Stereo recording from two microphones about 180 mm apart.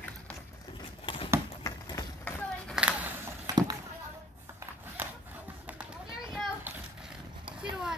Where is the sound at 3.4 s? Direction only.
20° right (ahead or behind).